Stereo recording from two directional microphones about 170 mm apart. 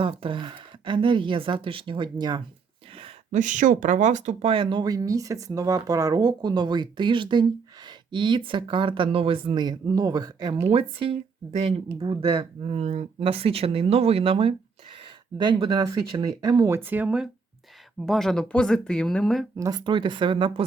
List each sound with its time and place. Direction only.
0.0 s speech: 30° right (ahead or behind)
3.3 s speech: 50° right (ahead or behind)
4.5 s speech: 30° right (ahead or behind)
10.6 s speech: 35° right (ahead or behind); by 19.5 s centre (ahead or behind)
19.5 s speech: 20° right (ahead or behind)